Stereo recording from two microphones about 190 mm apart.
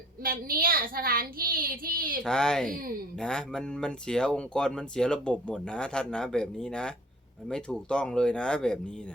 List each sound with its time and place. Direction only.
0.2 s speech: 50° right (ahead or behind)
2.2 s speech: 5° left (ahead or behind)